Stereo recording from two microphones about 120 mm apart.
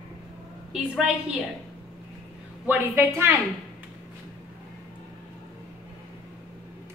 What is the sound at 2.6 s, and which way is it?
Speech, 15° right (ahead or behind).